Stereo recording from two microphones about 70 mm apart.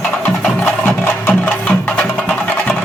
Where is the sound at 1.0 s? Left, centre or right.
Left.